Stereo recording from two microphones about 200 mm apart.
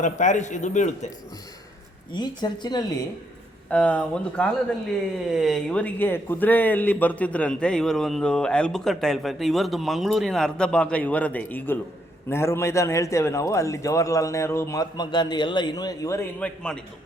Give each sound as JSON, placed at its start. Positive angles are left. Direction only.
{"t": 0.0, "sound": "a man's voice", "side_deg": 40}
{"t": 2.1, "sound": "a woman's voice", "side_deg": 20}
{"t": 3.7, "sound": "a man's voice", "side_deg": 5}